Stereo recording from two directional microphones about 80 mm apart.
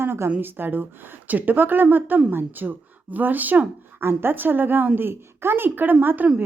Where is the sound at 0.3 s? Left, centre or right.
Right.